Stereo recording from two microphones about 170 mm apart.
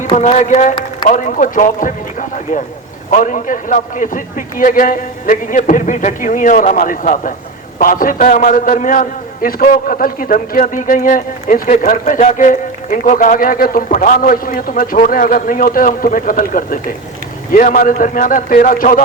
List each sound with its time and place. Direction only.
0.0 s a man's voice: 40° left (ahead or behind)